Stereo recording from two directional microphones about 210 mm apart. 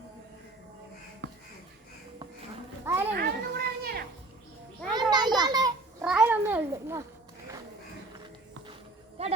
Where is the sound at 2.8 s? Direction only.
10° right (ahead or behind).